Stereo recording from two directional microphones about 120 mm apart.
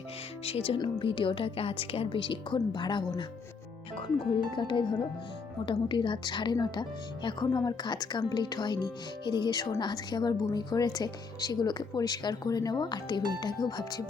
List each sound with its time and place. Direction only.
0.4 s speech: 55° left (ahead or behind)
4.5 s a woman's voice: 40° left (ahead or behind)